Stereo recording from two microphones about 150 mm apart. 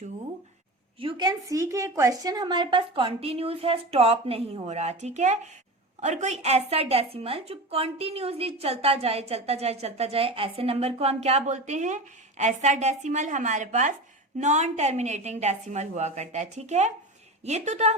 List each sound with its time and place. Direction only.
1.1 s a woman's voice: 25° right (ahead or behind); by 17.9 s 50° right (ahead or behind)